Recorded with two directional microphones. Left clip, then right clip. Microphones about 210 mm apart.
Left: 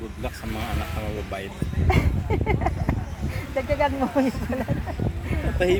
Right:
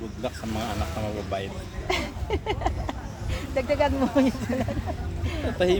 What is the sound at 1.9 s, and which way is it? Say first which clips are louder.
Speech: left 2 dB; 30° left (ahead or behind).